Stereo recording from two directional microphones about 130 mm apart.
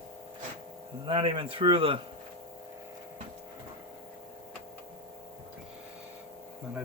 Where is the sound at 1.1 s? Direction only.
40° right (ahead or behind).